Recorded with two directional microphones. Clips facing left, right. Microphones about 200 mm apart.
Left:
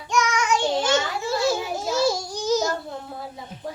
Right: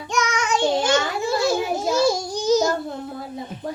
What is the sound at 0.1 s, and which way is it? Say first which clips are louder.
Child singing: left 1 dB; 20° right (ahead or behind).